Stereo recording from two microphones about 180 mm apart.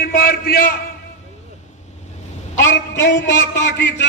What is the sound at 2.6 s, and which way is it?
Speech, 75° left (ahead or behind).